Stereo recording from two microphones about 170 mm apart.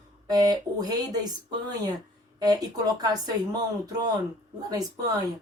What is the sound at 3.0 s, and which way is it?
Speech, 25° right (ahead or behind).